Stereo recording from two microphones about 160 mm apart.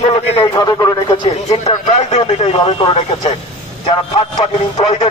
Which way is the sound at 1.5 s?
40° left (ahead or behind).